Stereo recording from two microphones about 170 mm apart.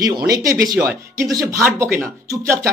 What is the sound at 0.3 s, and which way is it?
Speech, 20° right (ahead or behind).